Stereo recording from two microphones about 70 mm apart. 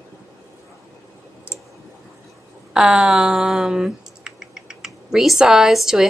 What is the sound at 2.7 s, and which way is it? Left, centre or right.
Speech, centre.